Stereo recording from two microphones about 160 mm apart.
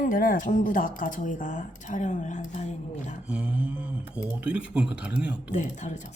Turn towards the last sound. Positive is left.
turn(degrees=50)  # may be behind; listen again after turning